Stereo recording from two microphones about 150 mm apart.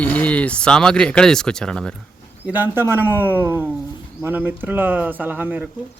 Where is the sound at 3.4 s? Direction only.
15° right (ahead or behind).